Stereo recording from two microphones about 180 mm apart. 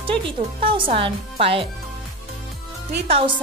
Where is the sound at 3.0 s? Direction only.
35° right (ahead or behind).